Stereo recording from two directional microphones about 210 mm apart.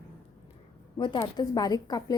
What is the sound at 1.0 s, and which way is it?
A woman's voice, 20° left (ahead or behind).